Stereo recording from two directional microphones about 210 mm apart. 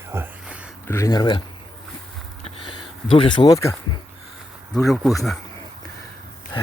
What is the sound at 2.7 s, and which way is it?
Speech, 25° left (ahead or behind).